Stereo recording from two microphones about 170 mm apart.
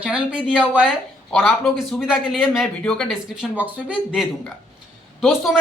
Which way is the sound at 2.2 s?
Centre (ahead or behind).